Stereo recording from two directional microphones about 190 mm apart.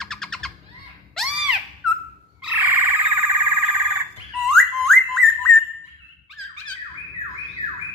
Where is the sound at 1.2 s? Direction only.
5° right (ahead or behind).